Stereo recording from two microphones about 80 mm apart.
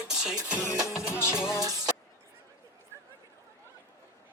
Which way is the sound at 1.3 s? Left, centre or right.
Centre.